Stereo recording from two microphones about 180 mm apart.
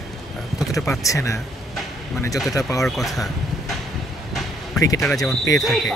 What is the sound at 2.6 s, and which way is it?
Speech, 20° left (ahead or behind).